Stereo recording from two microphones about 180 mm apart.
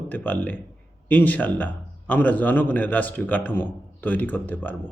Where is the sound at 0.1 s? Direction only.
10° left (ahead or behind).